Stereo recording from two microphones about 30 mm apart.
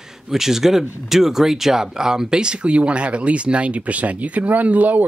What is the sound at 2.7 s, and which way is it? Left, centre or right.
Speech, right.